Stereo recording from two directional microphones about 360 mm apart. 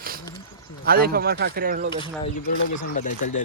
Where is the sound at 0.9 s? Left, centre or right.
Right.